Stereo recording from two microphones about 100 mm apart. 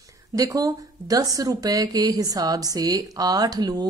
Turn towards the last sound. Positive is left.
turn(degrees=-40)  # may be behind; listen again after turning